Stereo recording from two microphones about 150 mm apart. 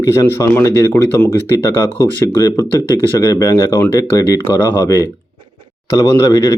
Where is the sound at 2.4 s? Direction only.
25° left (ahead or behind).